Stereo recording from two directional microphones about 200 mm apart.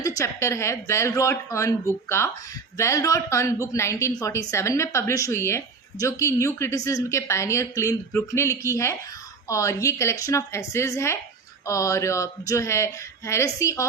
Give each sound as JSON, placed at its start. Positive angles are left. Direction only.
{"t": 0.2, "sound": "a woman's voice", "side_deg": 15}